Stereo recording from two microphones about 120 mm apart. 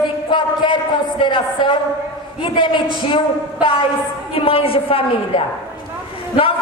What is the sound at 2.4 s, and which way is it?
Speech, 45° left (ahead or behind).